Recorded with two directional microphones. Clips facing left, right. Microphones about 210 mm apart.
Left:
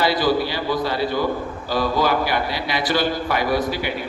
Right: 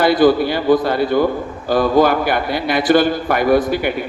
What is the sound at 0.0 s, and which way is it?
A man's voice, 50° right (ahead or behind).